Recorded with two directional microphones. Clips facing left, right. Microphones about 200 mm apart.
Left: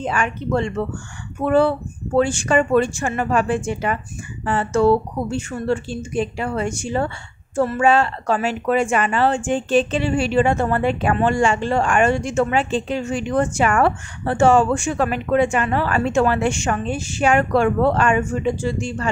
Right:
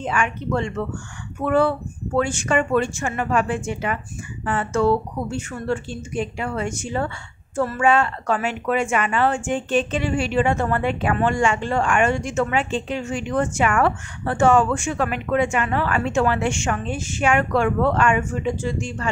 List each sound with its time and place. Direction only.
0.0 s speech: 35° left (ahead or behind)